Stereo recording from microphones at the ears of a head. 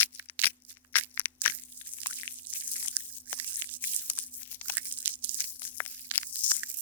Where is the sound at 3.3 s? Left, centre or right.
Right.